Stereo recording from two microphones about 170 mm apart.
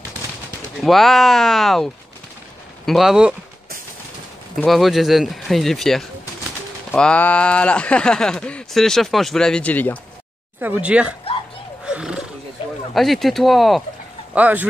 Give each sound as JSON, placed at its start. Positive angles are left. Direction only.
{"t": 0.7, "sound": "speech", "side_deg": 0}
{"t": 4.6, "sound": "speech", "side_deg": 0}
{"t": 10.6, "sound": "speech", "side_deg": -10}
{"t": 11.8, "sound": "a sound", "side_deg": -5}
{"t": 12.6, "sound": "a sound", "side_deg": 30}
{"t": 12.9, "sound": "speech", "side_deg": 0}